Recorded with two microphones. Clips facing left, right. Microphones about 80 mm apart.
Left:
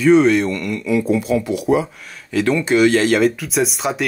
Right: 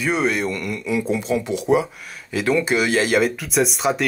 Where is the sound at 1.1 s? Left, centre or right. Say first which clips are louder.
Left 4 dB; right.